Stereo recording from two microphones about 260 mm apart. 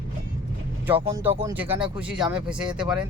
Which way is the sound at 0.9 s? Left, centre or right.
Centre.